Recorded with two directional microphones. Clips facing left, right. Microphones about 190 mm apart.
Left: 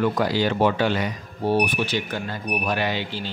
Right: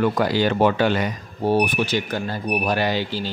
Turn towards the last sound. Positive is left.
turn(degrees=-35)  # may be behind; listen again after turning